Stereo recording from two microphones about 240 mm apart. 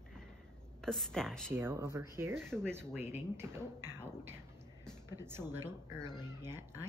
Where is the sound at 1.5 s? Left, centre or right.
Centre.